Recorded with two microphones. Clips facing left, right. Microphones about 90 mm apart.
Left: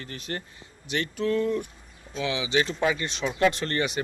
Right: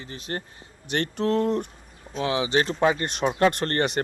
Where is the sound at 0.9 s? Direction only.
55° right (ahead or behind).